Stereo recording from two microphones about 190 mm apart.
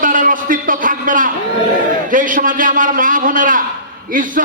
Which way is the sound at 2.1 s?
45° right (ahead or behind).